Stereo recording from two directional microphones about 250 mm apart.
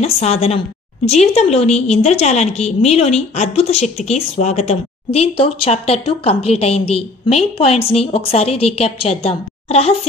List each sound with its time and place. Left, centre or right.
0.0 s a woman's voice: left